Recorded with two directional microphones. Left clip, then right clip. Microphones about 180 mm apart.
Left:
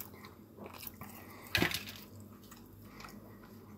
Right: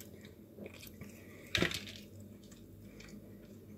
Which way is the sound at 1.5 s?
45° left (ahead or behind).